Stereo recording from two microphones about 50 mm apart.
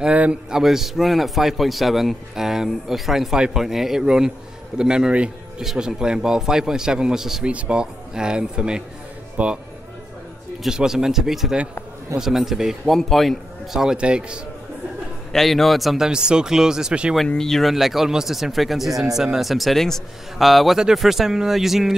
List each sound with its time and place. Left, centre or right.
0.1 s a man's voice: right
0.5 s a man's voice: centre
7.4 s a man's voice: right
9.4 s a man's voice: right
10.7 s a man's voice: centre
13.7 s a man's voice: centre
15.3 s a man's voice: centre
16.1 s a man's voice: centre
17.3 s a man's voice: centre